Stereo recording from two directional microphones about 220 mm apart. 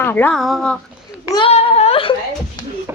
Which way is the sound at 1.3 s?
25° left (ahead or behind).